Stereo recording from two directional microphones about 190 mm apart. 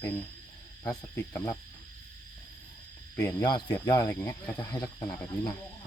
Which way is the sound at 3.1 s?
15° left (ahead or behind).